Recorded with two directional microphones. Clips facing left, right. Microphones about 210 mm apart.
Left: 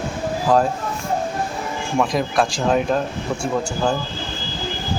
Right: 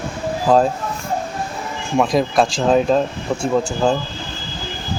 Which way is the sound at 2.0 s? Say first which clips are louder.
Right 4 dB; 20° right (ahead or behind).